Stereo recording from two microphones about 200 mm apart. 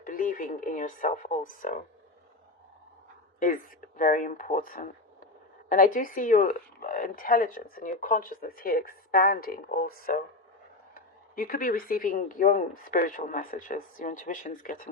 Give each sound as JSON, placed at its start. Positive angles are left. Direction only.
{"t": 0.0, "sound": "speech", "side_deg": 45}
{"t": 3.4, "sound": "speech", "side_deg": 40}